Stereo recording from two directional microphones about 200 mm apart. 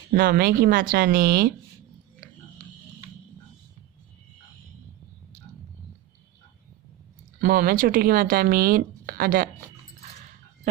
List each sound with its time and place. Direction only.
0.1 s speech: 50° right (ahead or behind)
7.4 s speech: 50° right (ahead or behind)